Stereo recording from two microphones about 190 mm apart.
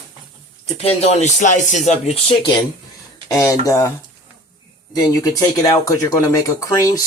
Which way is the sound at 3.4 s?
15° left (ahead or behind).